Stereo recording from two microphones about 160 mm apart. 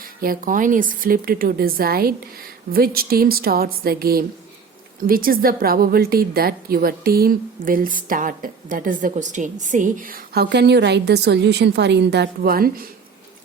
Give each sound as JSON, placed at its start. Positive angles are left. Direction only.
{"t": 0.0, "sound": "a woman's voice", "side_deg": -65}